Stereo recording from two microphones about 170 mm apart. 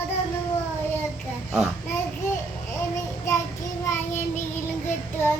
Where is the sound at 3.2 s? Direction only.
20° left (ahead or behind).